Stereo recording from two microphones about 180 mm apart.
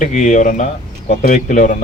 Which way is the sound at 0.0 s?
45° left (ahead or behind).